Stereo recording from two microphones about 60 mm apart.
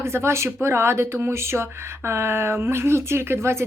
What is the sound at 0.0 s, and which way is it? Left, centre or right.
Speech, right.